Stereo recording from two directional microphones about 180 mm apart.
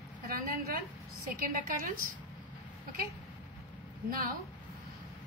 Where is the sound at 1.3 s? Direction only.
50° right (ahead or behind).